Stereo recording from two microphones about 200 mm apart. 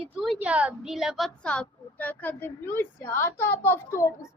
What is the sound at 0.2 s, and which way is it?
A woman's voice, 5° right (ahead or behind).